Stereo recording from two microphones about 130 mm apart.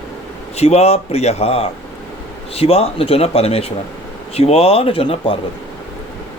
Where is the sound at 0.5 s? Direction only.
55° left (ahead or behind).